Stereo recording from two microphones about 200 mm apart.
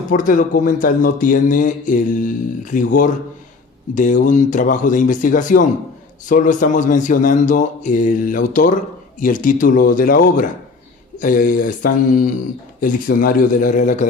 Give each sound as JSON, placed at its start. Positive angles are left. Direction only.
{"t": 0.1, "sound": "a man's voice", "side_deg": 40}